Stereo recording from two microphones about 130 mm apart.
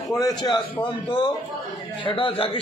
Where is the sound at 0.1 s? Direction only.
30° left (ahead or behind).